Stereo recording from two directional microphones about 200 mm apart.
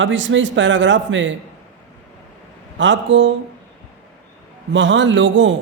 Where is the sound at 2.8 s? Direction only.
65° right (ahead or behind).